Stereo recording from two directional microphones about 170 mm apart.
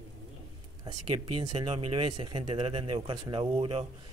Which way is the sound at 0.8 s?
25° right (ahead or behind).